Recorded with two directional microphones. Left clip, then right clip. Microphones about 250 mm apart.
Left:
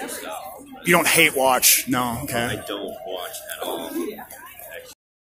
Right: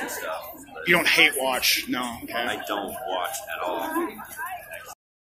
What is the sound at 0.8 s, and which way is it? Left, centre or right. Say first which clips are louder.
Speech: left 2 dB; left.